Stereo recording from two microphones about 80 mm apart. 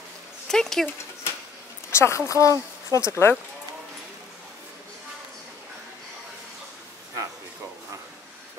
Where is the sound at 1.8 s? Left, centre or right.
Left.